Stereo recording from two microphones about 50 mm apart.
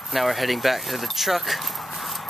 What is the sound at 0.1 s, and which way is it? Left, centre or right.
Speech, centre.